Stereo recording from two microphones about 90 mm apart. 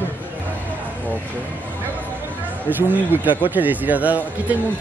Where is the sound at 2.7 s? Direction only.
20° right (ahead or behind).